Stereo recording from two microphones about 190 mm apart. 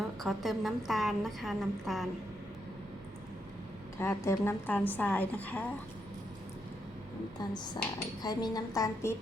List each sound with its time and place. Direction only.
0.2 s a woman's voice: centre (ahead or behind)
3.9 s a woman's voice: 15° left (ahead or behind)
8.2 s a woman's voice: 20° left (ahead or behind)